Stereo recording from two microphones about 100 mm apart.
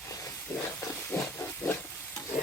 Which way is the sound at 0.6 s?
25° left (ahead or behind).